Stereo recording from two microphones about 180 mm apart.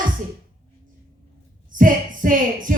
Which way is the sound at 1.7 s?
50° right (ahead or behind).